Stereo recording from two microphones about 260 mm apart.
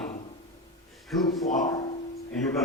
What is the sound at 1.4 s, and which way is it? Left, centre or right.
Speech, left.